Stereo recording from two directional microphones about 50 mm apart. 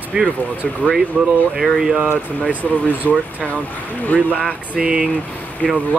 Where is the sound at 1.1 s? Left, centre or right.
Left.